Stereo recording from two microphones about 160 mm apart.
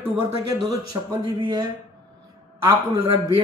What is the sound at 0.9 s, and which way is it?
Speech, 20° right (ahead or behind).